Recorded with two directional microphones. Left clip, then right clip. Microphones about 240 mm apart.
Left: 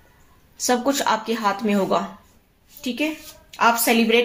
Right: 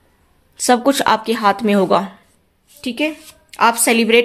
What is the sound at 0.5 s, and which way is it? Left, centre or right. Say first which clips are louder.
A woman's voice: right 6 dB; right.